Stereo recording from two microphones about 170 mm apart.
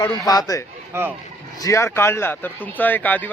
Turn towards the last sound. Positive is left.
turn(degrees=10)  # may be behind; listen again after turning